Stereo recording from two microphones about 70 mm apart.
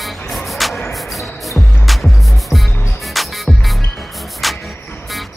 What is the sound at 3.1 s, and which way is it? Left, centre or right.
Music, centre.